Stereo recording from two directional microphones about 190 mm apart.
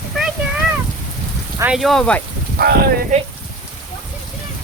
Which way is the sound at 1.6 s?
5° right (ahead or behind).